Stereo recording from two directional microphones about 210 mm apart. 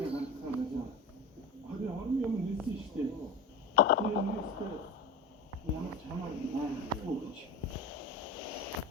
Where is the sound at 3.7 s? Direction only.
50° left (ahead or behind).